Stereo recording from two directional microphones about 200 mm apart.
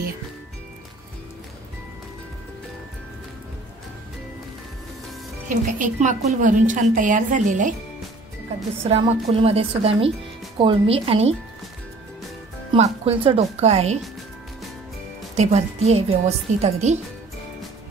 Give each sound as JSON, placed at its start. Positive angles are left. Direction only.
{"t": 5.5, "sound": "a woman's voice", "side_deg": -40}
{"t": 8.8, "sound": "a woman's voice", "side_deg": -30}
{"t": 12.7, "sound": "a woman's voice", "side_deg": -30}
{"t": 15.3, "sound": "a woman's voice", "side_deg": -35}